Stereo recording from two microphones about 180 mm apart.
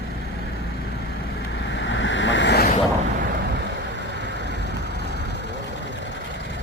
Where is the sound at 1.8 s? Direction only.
90° left.